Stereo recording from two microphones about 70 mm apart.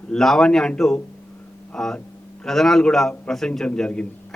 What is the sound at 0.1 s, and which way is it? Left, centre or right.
A man's voice, centre.